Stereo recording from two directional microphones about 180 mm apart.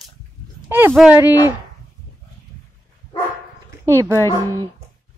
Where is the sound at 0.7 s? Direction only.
10° right (ahead or behind).